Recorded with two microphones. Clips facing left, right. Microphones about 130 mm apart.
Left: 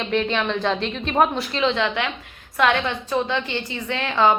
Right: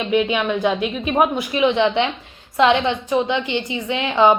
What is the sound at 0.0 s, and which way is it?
A woman's voice, 10° right (ahead or behind).